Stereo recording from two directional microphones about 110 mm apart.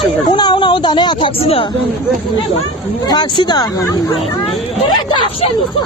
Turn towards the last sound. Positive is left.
turn(degrees=55)  # may be behind; listen again after turning